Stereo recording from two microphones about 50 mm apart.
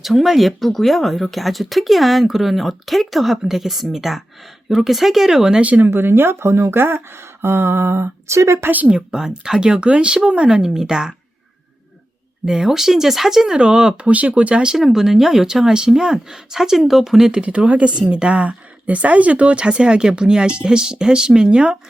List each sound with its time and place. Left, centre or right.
0.0 s speech: centre
5.6 s speech: right
5.9 s speech: right
6.7 s speech: right
8.5 s speech: right
8.9 s a woman's voice: centre
12.5 s a woman's voice: centre
13.6 s speech: centre
14.8 s a woman's voice: centre
17.4 s speech: right